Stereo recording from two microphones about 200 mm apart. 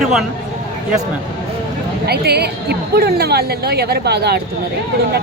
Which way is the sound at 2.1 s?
55° right (ahead or behind).